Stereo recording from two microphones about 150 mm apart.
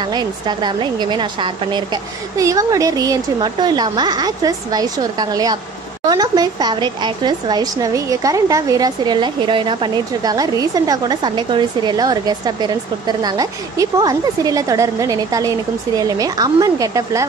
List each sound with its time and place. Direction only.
0.0 s speech: 30° right (ahead or behind)